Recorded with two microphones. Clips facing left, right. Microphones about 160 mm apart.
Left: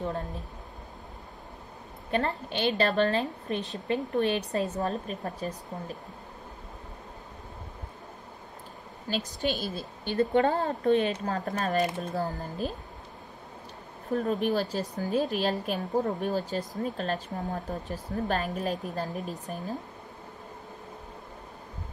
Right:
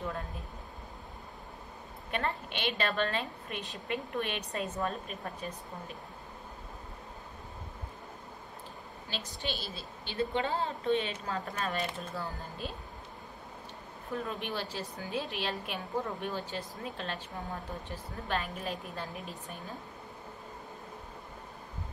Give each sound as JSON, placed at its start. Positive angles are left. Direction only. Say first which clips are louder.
{"t": 2.0, "sound": "a woman's voice", "louder": "left 6 dB", "side_deg": 35}
{"t": 9.1, "sound": "a woman's voice", "louder": "left 9 dB", "side_deg": 45}
{"t": 14.1, "sound": "a woman's voice", "louder": "left 10 dB", "side_deg": 40}